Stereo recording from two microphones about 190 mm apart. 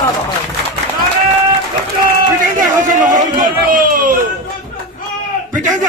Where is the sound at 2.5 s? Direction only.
45° right (ahead or behind).